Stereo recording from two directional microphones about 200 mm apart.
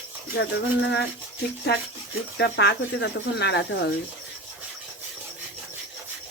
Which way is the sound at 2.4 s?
60° left (ahead or behind).